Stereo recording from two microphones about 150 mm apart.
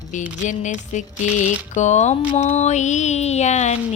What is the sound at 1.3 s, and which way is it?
Music, 50° left (ahead or behind).